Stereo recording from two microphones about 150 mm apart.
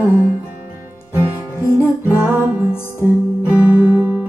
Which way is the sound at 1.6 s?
15° left (ahead or behind).